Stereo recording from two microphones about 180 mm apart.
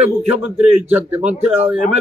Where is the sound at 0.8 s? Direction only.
10° right (ahead or behind).